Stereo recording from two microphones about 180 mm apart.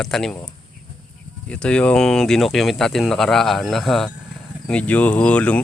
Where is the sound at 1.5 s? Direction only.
5° left (ahead or behind).